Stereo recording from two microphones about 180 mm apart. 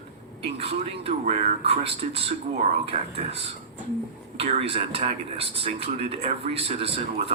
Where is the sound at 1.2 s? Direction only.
35° right (ahead or behind).